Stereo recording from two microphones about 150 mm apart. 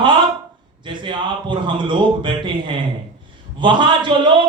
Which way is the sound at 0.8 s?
35° right (ahead or behind).